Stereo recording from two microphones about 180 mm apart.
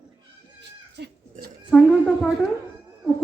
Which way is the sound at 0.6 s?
65° right (ahead or behind).